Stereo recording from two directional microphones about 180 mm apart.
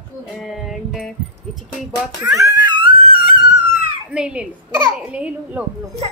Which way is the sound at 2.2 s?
20° right (ahead or behind).